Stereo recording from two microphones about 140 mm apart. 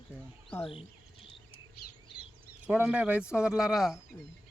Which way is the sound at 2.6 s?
10° right (ahead or behind).